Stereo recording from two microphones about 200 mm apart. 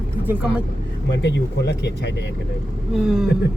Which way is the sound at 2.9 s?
5° right (ahead or behind).